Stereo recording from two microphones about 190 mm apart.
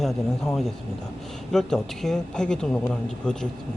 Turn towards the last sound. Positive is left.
turn(degrees=5)  # may be behind; listen again after turning